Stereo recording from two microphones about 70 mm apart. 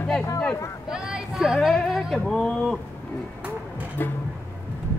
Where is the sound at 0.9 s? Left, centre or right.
Centre.